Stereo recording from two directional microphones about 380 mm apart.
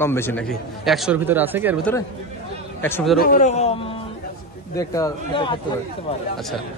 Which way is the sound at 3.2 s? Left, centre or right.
Left.